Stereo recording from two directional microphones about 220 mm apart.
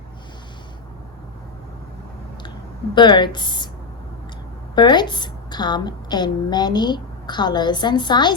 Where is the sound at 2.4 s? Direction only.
20° left (ahead or behind).